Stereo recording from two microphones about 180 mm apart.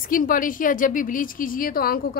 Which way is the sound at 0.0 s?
50° left (ahead or behind).